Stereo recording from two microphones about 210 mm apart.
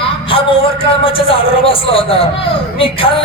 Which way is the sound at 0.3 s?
25° left (ahead or behind).